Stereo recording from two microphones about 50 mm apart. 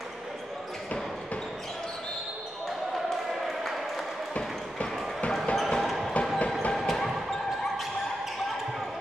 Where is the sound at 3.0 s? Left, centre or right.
Centre.